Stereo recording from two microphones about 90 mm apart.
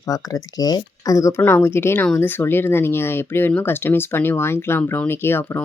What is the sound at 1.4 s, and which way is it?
Speech, 25° left (ahead or behind).